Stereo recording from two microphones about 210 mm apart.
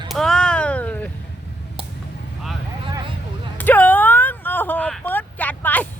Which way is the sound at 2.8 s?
25° right (ahead or behind).